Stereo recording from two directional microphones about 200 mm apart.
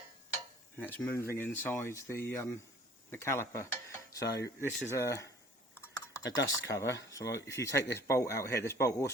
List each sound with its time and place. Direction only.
0.8 s speech: 10° left (ahead or behind)
6.3 s speech: 15° left (ahead or behind)